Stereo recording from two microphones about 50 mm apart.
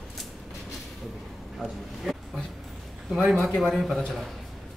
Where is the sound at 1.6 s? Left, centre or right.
Centre.